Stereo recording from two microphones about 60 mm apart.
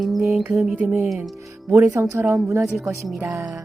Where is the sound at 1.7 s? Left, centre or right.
Right.